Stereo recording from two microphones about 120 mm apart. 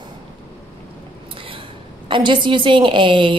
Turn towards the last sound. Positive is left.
turn(degrees=-45)  # may be behind; listen again after turning